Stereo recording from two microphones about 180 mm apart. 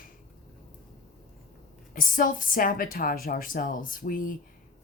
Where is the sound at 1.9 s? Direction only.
50° left (ahead or behind).